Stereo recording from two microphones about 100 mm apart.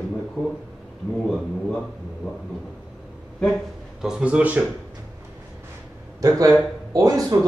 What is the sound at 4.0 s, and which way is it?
Speech, 10° right (ahead or behind).